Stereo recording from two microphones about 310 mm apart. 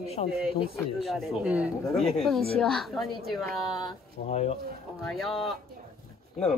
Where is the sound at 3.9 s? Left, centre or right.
Centre.